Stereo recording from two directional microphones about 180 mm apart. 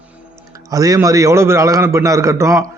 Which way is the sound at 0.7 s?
20° right (ahead or behind).